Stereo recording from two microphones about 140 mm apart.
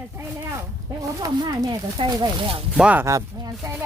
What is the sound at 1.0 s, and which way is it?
Speech, 25° right (ahead or behind).